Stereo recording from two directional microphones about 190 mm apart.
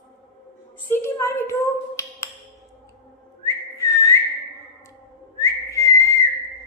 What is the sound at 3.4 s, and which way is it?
Whistling, 15° left (ahead or behind).